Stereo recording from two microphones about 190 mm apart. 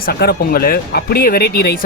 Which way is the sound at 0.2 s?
50° left (ahead or behind).